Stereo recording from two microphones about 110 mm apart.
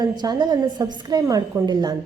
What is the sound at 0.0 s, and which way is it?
A woman's voice, 40° right (ahead or behind).